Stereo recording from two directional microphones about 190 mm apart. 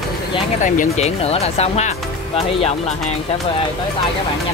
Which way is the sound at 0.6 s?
40° left (ahead or behind).